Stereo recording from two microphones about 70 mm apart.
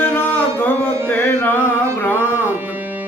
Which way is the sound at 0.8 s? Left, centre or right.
Right.